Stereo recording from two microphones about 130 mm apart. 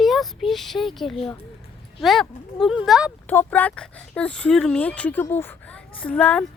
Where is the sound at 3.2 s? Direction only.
15° left (ahead or behind).